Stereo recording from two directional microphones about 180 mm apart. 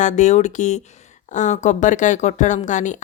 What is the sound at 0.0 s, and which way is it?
A woman's voice, 40° left (ahead or behind).